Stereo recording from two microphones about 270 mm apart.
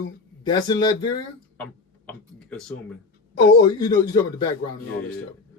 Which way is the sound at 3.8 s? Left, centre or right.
Centre.